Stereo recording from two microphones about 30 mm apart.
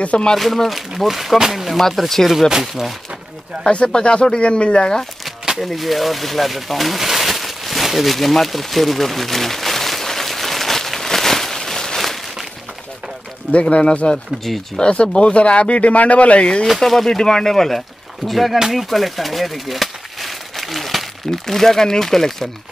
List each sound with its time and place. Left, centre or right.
0.4 s speech: centre
1.8 s speech: centre
2.6 s speech: centre
3.6 s speech: left
5.6 s speech: centre
8.1 s a sound: centre
13.5 s speech: left
14.5 s speech: centre
14.8 s speech: left
16.8 s speech: centre
21.3 s speech: centre